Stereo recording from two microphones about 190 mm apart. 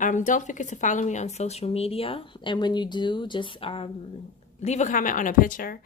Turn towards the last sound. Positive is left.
turn(degrees=50)  # may be behind; listen again after turning